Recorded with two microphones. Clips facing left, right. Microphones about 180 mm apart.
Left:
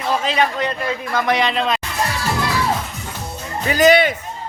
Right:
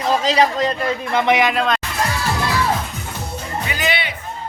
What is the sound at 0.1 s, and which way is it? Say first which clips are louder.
Speech: right 2 dB; 35° right (ahead or behind).